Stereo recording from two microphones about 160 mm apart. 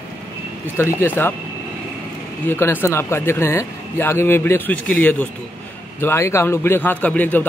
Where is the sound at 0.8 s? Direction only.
15° left (ahead or behind).